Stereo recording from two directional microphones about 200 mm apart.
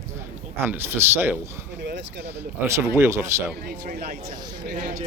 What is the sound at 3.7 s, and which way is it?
A man's voice, 50° right (ahead or behind).